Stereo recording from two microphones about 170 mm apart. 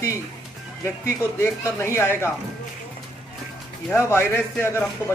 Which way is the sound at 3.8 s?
15° left (ahead or behind).